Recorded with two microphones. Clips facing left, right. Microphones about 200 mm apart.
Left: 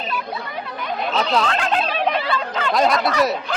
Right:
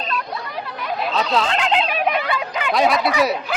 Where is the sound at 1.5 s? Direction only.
20° right (ahead or behind).